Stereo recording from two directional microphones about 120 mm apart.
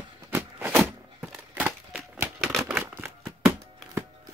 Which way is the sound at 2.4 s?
Centre (ahead or behind).